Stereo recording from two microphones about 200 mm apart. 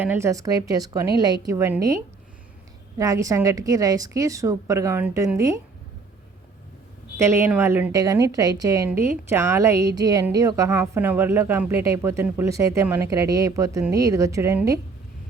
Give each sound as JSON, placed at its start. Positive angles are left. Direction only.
{"t": 0.0, "sound": "a woman's voice", "side_deg": -10}
{"t": 3.0, "sound": "a woman's voice", "side_deg": -15}
{"t": 7.2, "sound": "a woman's voice", "side_deg": -15}